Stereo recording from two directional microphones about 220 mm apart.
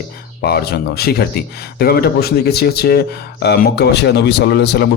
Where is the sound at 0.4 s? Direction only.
45° left (ahead or behind).